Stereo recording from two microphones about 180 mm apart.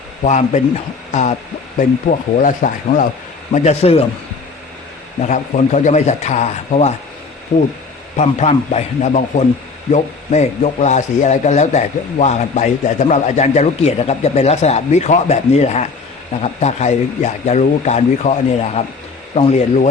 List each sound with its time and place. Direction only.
0.3 s speech: 40° left (ahead or behind)
5.2 s speech: 40° left (ahead or behind)
8.1 s speech: 40° left (ahead or behind)